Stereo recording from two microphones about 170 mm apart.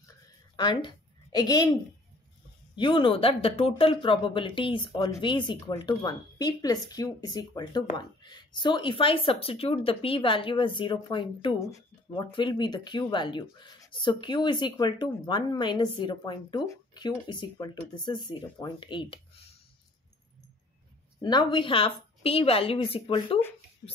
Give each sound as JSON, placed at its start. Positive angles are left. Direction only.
{"t": 0.6, "sound": "a woman's voice", "side_deg": 25}
{"t": 21.2, "sound": "a woman's voice", "side_deg": 25}